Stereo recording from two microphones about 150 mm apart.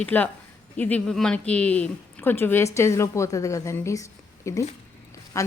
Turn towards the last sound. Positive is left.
turn(degrees=20)  # may be behind; listen again after turning